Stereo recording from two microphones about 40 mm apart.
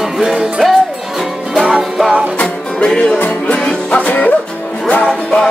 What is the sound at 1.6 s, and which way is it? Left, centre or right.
Music, centre.